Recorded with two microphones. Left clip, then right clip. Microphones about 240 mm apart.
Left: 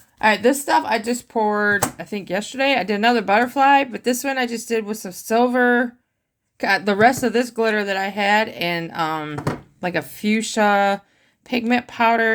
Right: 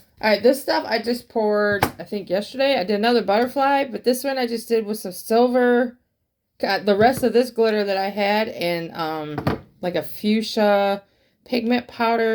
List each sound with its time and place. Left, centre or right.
0.2 s speech: left